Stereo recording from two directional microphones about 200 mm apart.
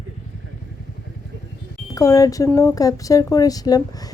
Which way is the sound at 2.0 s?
15° left (ahead or behind).